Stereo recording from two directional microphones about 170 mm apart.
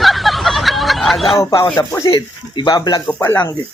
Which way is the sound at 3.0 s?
15° left (ahead or behind).